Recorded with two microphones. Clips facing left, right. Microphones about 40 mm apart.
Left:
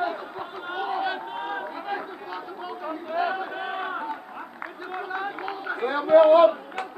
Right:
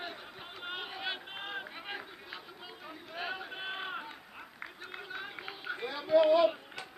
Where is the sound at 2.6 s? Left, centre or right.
Centre.